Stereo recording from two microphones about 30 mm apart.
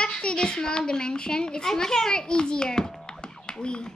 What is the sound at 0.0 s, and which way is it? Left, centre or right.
A child's voice, left.